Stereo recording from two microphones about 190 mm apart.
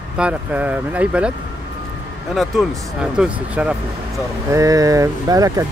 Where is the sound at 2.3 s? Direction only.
Centre (ahead or behind).